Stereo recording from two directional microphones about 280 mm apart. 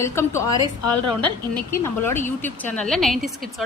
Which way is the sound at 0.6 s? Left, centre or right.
Centre.